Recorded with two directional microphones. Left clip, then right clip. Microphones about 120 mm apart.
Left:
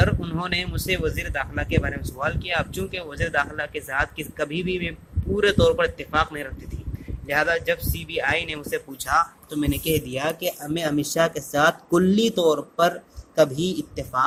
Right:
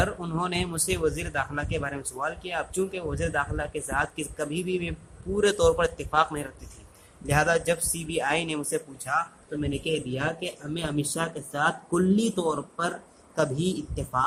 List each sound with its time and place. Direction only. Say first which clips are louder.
0.2 s speech: left 2 dB; 10° right (ahead or behind)
9.6 s speech: left 5 dB; 55° left (ahead or behind)
10.1 s a man's voice: left 5 dB; 30° left (ahead or behind); by 14.3 s 15° left (ahead or behind)